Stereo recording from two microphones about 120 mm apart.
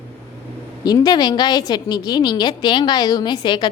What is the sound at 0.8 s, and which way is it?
A woman's voice, 35° left (ahead or behind).